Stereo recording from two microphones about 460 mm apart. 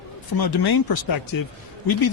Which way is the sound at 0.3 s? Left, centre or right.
Left.